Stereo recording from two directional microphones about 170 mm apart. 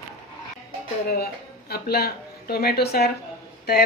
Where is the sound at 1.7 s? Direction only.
65° left (ahead or behind).